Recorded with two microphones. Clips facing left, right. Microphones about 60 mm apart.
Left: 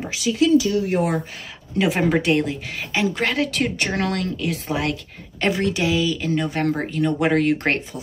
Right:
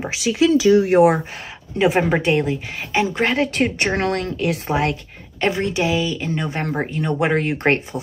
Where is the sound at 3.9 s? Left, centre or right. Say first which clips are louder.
Right 2 dB; right.